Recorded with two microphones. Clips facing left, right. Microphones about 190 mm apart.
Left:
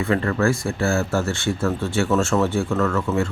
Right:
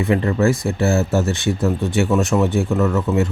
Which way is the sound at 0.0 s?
20° right (ahead or behind).